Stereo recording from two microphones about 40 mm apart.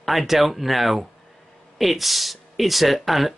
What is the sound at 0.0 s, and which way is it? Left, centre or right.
Speech, centre.